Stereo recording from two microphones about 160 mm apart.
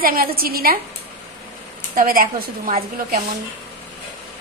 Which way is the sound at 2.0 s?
60° right (ahead or behind).